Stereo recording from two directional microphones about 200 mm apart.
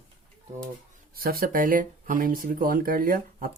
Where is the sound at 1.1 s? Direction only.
50° right (ahead or behind).